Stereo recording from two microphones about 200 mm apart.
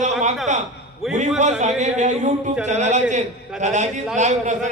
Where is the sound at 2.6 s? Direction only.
35° right (ahead or behind).